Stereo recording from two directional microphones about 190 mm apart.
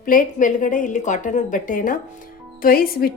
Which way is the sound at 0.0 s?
45° left (ahead or behind).